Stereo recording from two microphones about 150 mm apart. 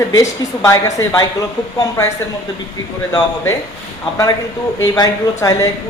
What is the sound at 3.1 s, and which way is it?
Speech, 25° left (ahead or behind).